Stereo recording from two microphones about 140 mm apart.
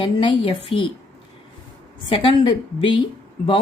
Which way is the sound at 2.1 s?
40° left (ahead or behind).